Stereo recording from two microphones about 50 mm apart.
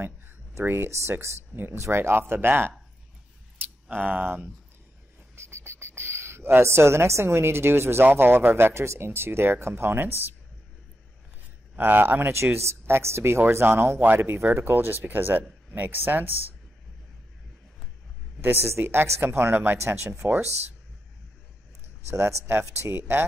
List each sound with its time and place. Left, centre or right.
0.7 s speech: right
3.9 s speech: right
5.3 s cricket: right
6.6 s a woman's voice: right
8.0 s speech: right
11.7 s speech: right
12.4 s a woman's voice: right
18.4 s speech: right
18.7 s a woman's voice: right
20.2 s speech: right
22.1 s speech: right
22.5 s speech: right